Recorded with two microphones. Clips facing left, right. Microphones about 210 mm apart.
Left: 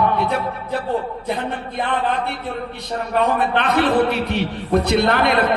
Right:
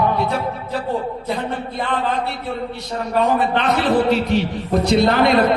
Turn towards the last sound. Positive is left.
turn(degrees=60)  # may be behind; listen again after turning